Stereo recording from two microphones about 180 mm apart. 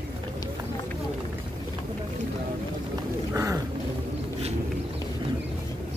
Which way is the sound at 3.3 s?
15° right (ahead or behind).